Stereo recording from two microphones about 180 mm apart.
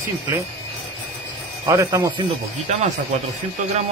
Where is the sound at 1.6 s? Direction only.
20° right (ahead or behind).